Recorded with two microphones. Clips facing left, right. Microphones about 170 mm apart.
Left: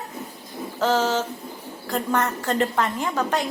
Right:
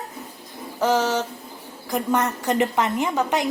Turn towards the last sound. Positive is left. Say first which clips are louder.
# right 2 dB
turn(degrees=-20)  # may be behind; listen again after turning